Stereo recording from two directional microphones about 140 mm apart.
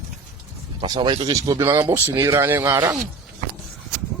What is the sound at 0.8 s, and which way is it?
Speech, 35° right (ahead or behind).